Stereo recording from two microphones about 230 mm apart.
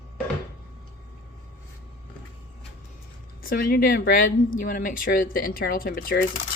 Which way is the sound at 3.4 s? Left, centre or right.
Left.